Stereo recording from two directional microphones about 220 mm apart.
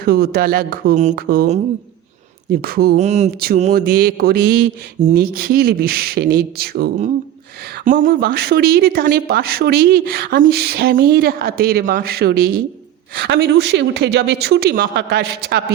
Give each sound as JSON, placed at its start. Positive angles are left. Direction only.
{"t": 0.0, "sound": "a man's voice", "side_deg": -45}
{"t": 3.0, "sound": "a man's voice", "side_deg": -30}